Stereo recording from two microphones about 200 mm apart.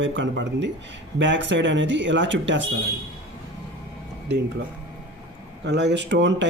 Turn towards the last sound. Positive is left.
turn(degrees=-60)  # may be behind; listen again after turning